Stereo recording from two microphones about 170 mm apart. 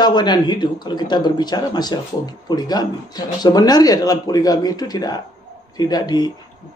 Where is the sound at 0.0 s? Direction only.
25° left (ahead or behind).